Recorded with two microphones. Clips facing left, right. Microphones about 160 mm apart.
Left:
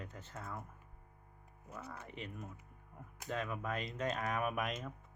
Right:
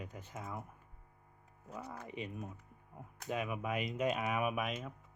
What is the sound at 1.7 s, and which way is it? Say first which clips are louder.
Speech: right 3 dB; 15° right (ahead or behind).